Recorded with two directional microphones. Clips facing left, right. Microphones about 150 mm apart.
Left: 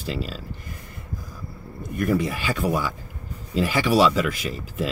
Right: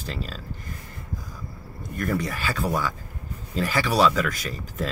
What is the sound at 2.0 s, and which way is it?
Speech, 10° left (ahead or behind).